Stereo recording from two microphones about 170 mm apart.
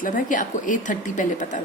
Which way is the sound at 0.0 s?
50° left (ahead or behind).